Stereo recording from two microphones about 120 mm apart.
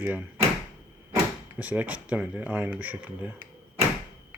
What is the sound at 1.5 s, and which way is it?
Speech, 10° right (ahead or behind).